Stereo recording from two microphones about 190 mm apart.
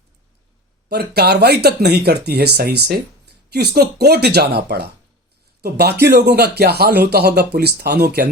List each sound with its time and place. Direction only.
0.9 s speech: 55° right (ahead or behind)